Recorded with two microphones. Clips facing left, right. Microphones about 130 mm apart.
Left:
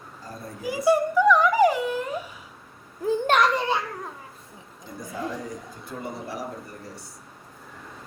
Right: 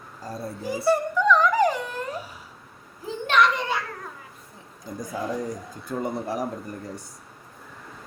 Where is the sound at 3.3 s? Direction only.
40° left (ahead or behind).